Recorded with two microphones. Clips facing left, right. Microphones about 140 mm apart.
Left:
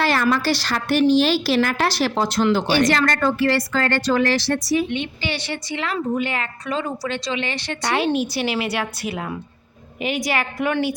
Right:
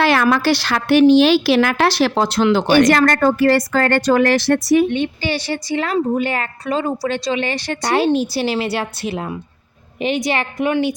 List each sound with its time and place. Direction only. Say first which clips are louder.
0.0 s a woman's voice: right 4 dB; 65° right (ahead or behind)
2.9 s a woman's voice: right 5 dB; 50° right (ahead or behind); by 10.9 s 20° right (ahead or behind)